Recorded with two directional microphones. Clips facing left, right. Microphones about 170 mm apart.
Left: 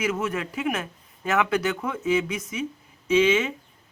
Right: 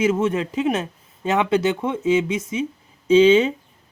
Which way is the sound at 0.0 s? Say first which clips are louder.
Right 7 dB; 25° right (ahead or behind).